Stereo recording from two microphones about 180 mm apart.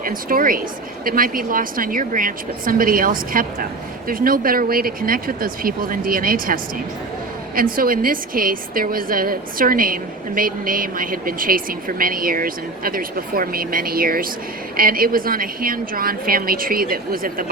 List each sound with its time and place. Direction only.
0.0 s a woman's voice: 50° right (ahead or behind)